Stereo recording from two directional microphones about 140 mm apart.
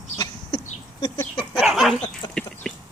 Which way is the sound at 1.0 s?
25° left (ahead or behind).